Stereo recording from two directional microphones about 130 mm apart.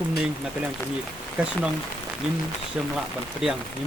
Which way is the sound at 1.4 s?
10° right (ahead or behind).